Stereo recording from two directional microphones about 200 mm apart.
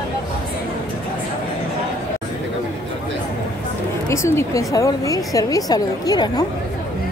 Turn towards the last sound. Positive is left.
turn(degrees=20)  # may be behind; listen again after turning